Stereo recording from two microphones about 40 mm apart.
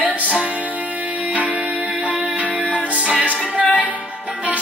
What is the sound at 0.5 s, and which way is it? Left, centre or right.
Music, right.